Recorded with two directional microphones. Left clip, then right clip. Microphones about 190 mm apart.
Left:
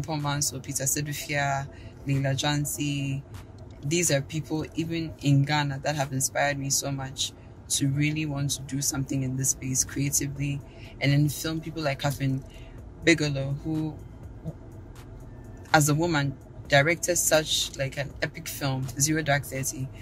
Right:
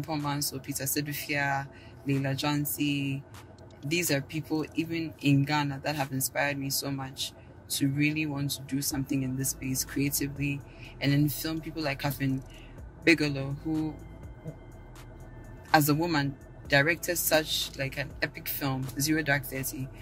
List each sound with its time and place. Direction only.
0.0 s speech: 5° left (ahead or behind)
15.7 s speech: 10° left (ahead or behind)